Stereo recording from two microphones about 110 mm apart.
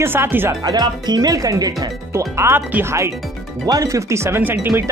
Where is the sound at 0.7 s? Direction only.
40° right (ahead or behind).